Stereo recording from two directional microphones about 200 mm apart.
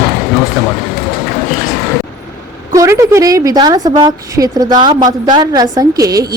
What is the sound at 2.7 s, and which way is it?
A woman's voice, 15° right (ahead or behind).